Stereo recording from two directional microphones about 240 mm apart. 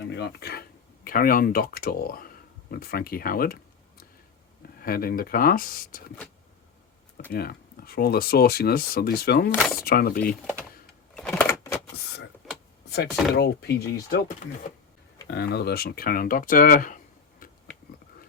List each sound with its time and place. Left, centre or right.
0.1 s speech: left
7.3 s speech: left
9.6 s speech: centre
9.8 s speech: left
11.1 s power windows: centre
12.9 s speech: left